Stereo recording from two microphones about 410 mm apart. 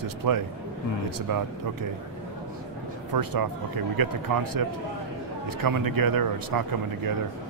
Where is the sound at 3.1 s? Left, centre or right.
Right.